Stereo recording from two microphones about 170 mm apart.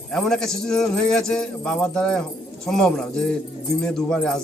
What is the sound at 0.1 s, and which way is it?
Speech, 5° left (ahead or behind).